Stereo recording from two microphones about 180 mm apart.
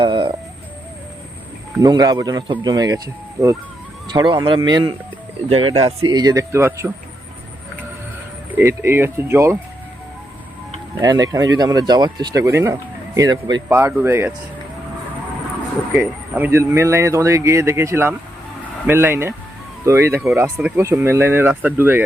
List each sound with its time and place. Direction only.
0.0 s a sound: 25° right (ahead or behind)
1.8 s speech: 20° right (ahead or behind)
6.1 s speech: 20° right (ahead or behind)
8.5 s speech: 15° right (ahead or behind)
11.0 s speech: 20° right (ahead or behind)
16.0 s speech: 10° right (ahead or behind)